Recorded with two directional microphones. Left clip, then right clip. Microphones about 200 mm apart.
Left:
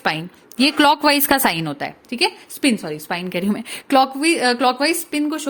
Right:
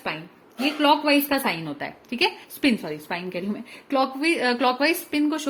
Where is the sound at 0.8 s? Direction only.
60° left (ahead or behind).